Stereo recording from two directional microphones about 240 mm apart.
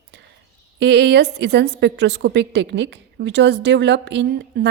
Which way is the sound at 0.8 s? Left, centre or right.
Right.